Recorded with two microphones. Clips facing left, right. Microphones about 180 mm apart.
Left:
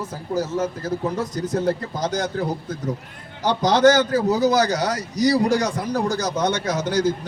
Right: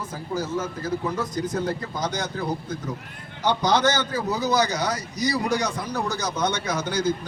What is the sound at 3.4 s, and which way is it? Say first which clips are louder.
A man's voice: left 5 dB; 40° left (ahead or behind).